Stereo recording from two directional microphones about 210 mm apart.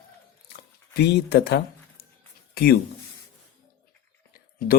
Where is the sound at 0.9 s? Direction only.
50° left (ahead or behind).